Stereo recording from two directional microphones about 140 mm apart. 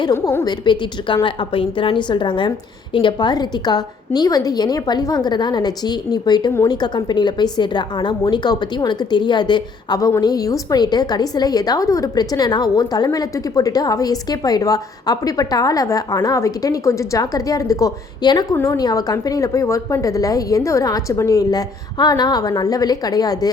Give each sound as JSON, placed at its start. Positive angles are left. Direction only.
{"t": 0.1, "sound": "a woman's voice", "side_deg": 20}